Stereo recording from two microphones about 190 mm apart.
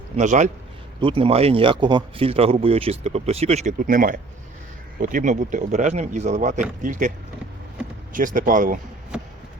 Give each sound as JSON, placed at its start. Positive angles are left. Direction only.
{"t": 0.2, "sound": "speech", "side_deg": -40}
{"t": 1.0, "sound": "speech", "side_deg": -30}
{"t": 3.8, "sound": "speech", "side_deg": -45}
{"t": 8.1, "sound": "speech", "side_deg": -45}